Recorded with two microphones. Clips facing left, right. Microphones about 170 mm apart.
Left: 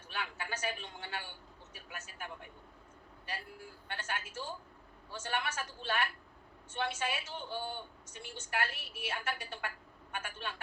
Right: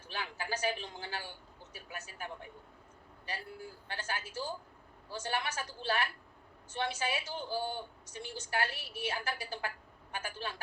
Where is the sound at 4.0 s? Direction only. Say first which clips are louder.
Right 2 dB; 35° right (ahead or behind).